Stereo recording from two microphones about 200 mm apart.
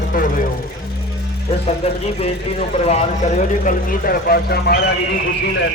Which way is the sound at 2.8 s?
35° left (ahead or behind).